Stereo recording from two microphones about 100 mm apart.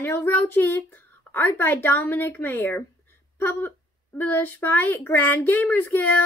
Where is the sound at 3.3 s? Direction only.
20° left (ahead or behind).